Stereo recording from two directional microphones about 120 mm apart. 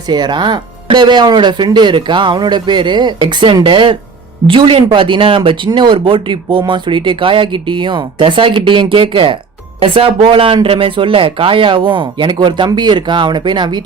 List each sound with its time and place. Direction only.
0.1 s speech: 35° right (ahead or behind)